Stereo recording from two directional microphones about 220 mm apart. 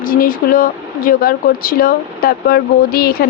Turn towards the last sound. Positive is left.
turn(degrees=45)  # may be behind; listen again after turning